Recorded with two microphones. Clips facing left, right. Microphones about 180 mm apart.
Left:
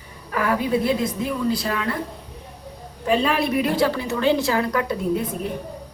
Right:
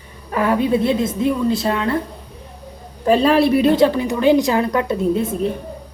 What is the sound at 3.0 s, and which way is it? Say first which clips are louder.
A woman's voice: right 7 dB; 35° right (ahead or behind).